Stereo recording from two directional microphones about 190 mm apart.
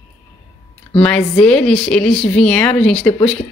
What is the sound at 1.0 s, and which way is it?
A woman's voice, 5° left (ahead or behind).